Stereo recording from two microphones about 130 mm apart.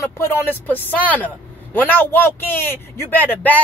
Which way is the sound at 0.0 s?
20° left (ahead or behind).